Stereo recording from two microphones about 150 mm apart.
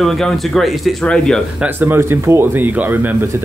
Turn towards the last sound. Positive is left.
turn(degrees=-10)  # may be behind; listen again after turning